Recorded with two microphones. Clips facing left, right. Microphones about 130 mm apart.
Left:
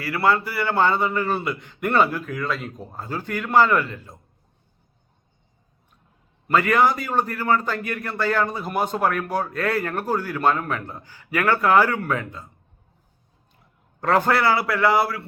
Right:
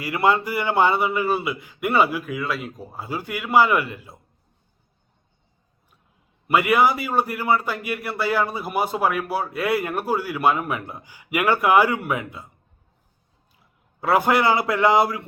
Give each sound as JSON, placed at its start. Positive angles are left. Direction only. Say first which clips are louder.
{"t": 0.0, "sound": "a man's voice", "louder": "right 1 dB", "side_deg": -20}
{"t": 6.5, "sound": "a man's voice", "louder": "even", "side_deg": -10}
{"t": 14.0, "sound": "a man's voice", "louder": "right 1 dB", "side_deg": -10}